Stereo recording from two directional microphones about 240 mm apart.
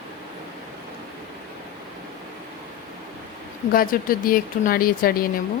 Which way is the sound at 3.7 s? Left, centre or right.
Left.